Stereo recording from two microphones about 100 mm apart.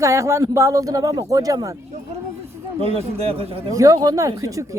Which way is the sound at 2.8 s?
80° right.